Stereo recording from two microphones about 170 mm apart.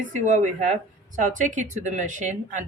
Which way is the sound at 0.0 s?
50° right (ahead or behind).